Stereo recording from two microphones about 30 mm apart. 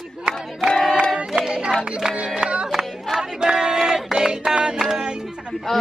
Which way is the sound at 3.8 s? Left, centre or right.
Centre.